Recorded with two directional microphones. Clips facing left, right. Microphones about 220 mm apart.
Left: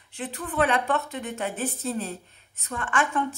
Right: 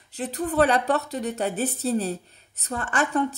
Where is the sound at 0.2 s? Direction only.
40° right (ahead or behind).